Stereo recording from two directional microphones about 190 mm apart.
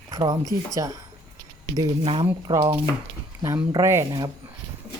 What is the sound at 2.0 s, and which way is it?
Speech, 30° right (ahead or behind).